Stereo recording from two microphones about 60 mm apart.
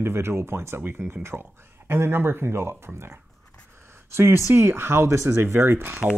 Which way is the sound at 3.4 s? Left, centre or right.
Centre.